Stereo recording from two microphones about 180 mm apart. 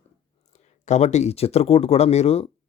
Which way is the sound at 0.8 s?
40° left (ahead or behind).